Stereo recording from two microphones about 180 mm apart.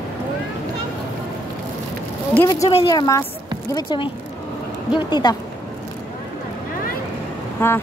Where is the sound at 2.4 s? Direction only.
20° left (ahead or behind).